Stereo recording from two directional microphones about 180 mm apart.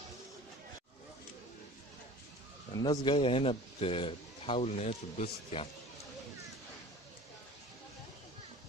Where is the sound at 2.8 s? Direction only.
25° left (ahead or behind).